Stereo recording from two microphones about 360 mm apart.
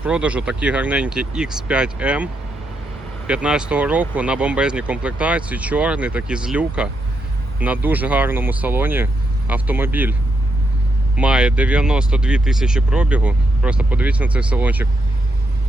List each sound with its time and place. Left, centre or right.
0.0 s speech: centre
11.2 s speech: centre